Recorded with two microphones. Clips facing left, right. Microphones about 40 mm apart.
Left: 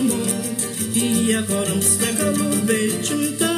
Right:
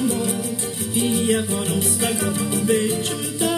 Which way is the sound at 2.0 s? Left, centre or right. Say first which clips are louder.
Left 5 dB; left.